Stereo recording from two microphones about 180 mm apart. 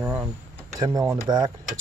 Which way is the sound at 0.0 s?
15° right (ahead or behind).